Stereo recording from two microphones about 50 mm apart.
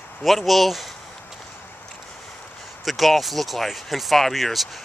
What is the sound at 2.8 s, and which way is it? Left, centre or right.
Speech, centre.